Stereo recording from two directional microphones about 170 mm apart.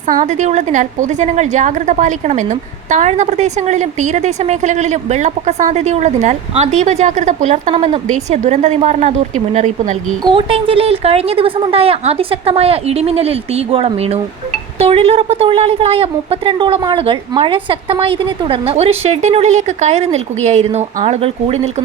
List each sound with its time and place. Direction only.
0.1 s a woman's voice: 50° right (ahead or behind)
10.2 s a woman's voice: 30° right (ahead or behind)